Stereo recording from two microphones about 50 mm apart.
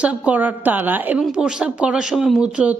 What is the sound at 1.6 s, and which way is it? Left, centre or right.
Speech, right.